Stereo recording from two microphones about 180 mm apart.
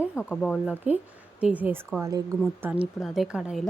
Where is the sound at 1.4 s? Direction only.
10° right (ahead or behind).